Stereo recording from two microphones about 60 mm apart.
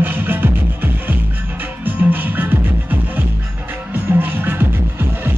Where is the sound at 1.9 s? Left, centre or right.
Right.